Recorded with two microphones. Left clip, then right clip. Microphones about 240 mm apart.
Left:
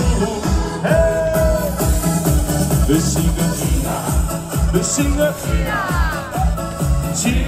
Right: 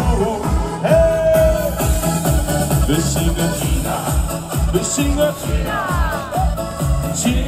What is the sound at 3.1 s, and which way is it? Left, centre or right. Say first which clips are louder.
Music: right 1 dB; centre.